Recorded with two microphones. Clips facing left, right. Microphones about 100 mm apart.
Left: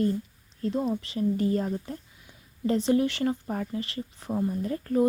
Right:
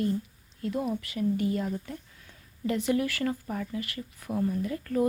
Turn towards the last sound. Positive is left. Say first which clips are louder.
# left 3 dB
turn(degrees=30)  # may be behind; listen again after turning